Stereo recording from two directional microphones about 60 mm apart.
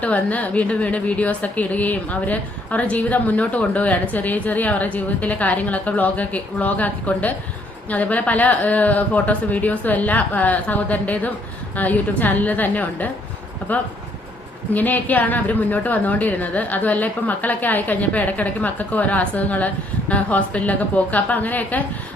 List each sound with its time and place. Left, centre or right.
0.0 s a woman's voice: left